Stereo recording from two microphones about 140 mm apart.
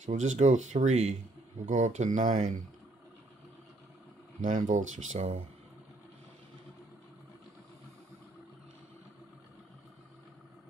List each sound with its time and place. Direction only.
0.0 s speech: 60° right (ahead or behind)
4.4 s speech: 65° right (ahead or behind)